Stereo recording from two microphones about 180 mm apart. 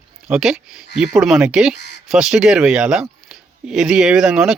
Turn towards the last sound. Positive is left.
turn(degrees=0)  # may be behind; listen again after turning